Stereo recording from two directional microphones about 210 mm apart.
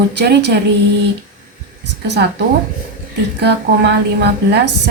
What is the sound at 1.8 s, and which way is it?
A woman's voice, 55° right (ahead or behind).